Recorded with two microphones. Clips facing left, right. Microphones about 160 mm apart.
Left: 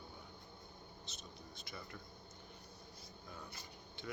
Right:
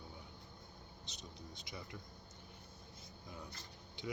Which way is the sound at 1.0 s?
20° right (ahead or behind).